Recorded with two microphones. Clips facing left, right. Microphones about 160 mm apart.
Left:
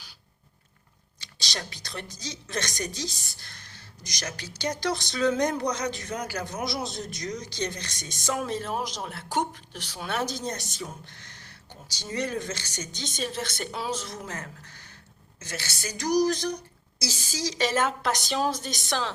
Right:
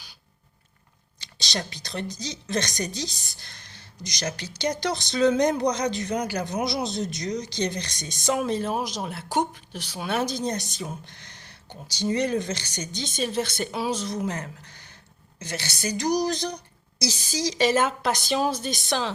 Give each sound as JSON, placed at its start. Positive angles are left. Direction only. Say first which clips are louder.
{"t": 1.2, "sound": "a woman's voice", "louder": "right 5 dB", "side_deg": -25}